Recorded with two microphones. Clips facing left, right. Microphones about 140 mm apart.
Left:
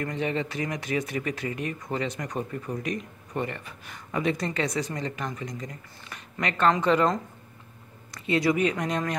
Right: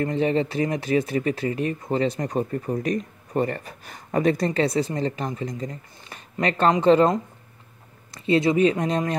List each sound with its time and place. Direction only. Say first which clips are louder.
0.0 s speech: right 7 dB; 30° right (ahead or behind)
4.5 s speech: right 6 dB; 30° right (ahead or behind)